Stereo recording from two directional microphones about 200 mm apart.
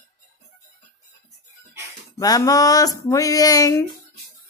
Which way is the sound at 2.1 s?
20° left (ahead or behind).